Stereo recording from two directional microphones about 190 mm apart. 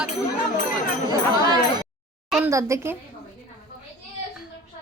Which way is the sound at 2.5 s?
15° right (ahead or behind).